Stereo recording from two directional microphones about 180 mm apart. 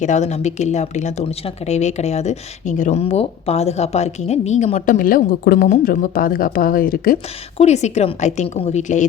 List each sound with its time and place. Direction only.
0.0 s speech: 40° left (ahead or behind)
7.6 s speech: 40° left (ahead or behind)